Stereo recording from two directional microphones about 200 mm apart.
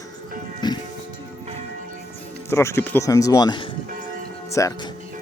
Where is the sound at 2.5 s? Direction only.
15° left (ahead or behind).